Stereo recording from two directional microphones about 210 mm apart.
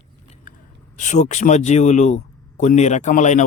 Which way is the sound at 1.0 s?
35° left (ahead or behind).